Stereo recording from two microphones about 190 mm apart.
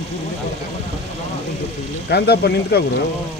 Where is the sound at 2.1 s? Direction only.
55° left (ahead or behind).